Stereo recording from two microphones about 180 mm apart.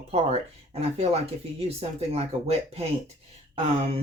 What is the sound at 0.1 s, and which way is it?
Speech, 35° right (ahead or behind).